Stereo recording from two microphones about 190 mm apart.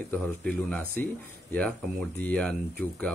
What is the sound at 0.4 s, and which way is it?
Speech, 5° left (ahead or behind).